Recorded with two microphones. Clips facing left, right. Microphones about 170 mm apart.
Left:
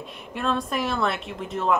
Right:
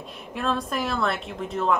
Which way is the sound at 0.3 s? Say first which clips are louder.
Left 1 dB; centre (ahead or behind).